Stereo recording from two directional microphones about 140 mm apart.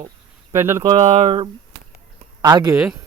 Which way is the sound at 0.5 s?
20° right (ahead or behind).